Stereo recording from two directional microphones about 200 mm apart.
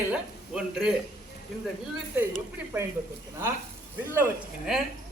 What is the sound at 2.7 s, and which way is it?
Speech, 10° right (ahead or behind).